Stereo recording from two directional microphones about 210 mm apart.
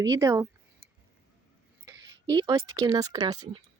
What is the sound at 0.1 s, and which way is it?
Speech, 15° right (ahead or behind).